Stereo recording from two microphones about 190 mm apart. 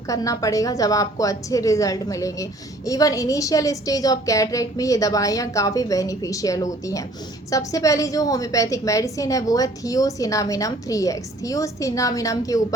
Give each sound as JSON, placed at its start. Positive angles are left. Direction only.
{"t": 0.1, "sound": "a woman's voice", "side_deg": 15}